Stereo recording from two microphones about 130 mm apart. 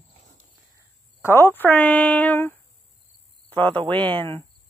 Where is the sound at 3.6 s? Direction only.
40° right (ahead or behind).